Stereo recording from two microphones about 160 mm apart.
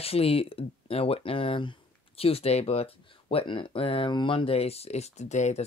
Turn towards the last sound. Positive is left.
turn(degrees=45)  # may be behind; listen again after turning